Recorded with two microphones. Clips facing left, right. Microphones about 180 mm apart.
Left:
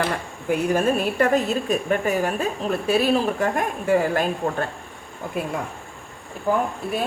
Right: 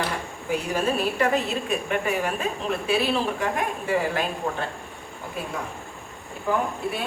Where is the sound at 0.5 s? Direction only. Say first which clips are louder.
Left 4 dB; 50° left (ahead or behind).